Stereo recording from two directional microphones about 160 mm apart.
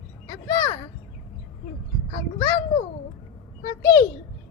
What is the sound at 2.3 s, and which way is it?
Speech, 25° left (ahead or behind).